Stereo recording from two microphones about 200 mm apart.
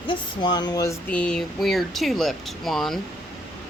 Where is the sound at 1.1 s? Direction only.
5° left (ahead or behind).